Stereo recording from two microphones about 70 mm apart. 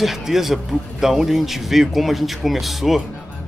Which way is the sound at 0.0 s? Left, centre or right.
Centre.